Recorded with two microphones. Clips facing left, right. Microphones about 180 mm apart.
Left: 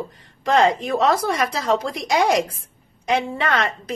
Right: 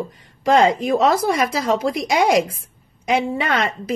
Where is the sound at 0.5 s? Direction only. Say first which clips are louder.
Right 2 dB; 10° right (ahead or behind).